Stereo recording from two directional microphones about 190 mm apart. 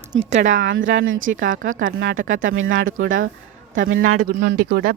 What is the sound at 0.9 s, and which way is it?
Speech, 90° right.